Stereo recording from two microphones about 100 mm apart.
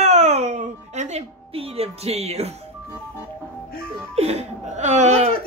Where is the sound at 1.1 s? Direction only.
75° right (ahead or behind).